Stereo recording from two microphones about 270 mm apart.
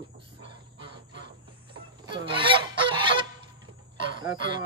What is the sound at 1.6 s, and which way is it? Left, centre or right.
Goose, centre.